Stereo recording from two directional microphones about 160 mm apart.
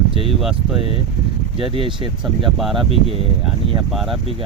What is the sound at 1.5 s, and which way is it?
Speech, 35° right (ahead or behind).